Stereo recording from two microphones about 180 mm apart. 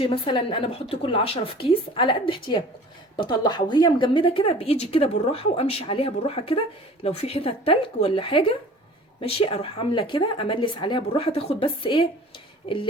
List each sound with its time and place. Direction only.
0.0 s a woman's voice: 30° left (ahead or behind)